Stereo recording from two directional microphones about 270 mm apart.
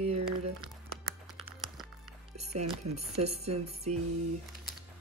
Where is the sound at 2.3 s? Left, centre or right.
Right.